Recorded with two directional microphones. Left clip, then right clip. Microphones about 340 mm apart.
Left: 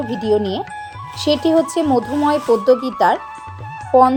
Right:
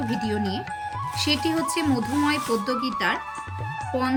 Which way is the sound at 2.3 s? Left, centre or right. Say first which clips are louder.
Left 11 dB; left.